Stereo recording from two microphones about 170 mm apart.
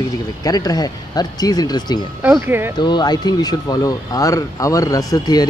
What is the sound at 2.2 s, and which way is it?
Speech, 10° right (ahead or behind).